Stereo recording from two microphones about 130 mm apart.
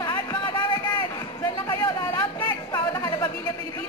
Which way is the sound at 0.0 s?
35° left (ahead or behind).